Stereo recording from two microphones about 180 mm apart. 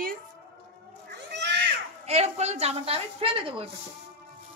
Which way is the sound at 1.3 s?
70° right (ahead or behind).